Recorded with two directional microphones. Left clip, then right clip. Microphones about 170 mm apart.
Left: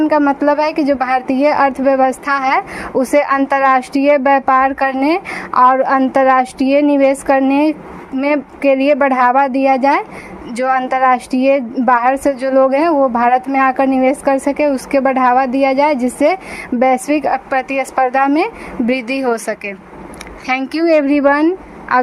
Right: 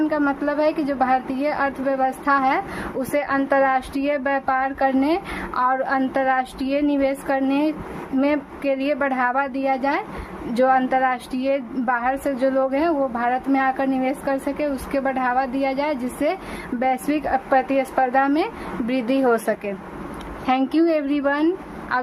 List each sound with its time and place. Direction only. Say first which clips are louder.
0.1 s a woman's voice: left 9 dB; 40° left (ahead or behind)